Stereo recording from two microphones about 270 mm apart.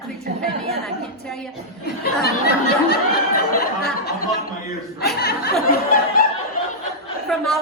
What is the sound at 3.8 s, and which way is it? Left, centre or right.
Speech, left.